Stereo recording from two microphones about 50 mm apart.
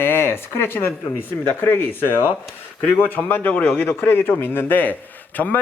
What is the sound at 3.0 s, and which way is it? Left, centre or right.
A man's voice, left.